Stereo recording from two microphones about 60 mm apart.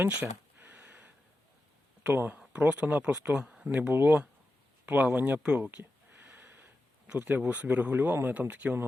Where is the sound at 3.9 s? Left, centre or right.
Right.